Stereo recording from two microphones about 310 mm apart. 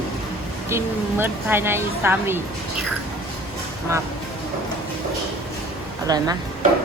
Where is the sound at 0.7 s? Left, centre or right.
Centre.